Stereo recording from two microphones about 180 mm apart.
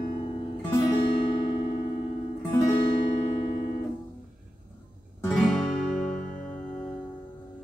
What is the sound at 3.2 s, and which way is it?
Music, 35° left (ahead or behind).